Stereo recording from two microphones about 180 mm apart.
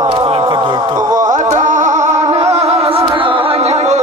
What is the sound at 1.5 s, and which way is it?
Music, 45° right (ahead or behind).